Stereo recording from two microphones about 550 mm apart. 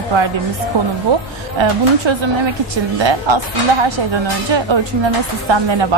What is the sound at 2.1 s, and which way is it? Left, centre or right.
A woman's voice, right.